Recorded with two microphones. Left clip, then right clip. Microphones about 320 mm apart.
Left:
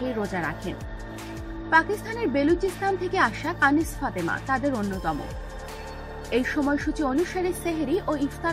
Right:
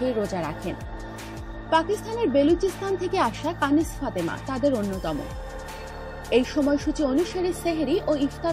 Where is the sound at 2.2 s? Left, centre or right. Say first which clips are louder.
Right 3 dB; centre.